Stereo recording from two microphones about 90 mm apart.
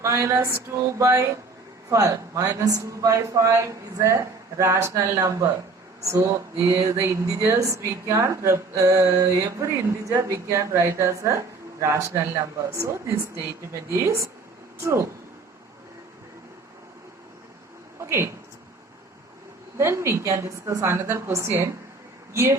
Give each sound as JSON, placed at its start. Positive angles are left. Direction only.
{"t": 0.0, "sound": "speech", "side_deg": -30}
{"t": 6.9, "sound": "a sound", "side_deg": -25}
{"t": 7.3, "sound": "speech", "side_deg": -30}
{"t": 18.0, "sound": "speech", "side_deg": -30}
{"t": 19.7, "sound": "speech", "side_deg": -30}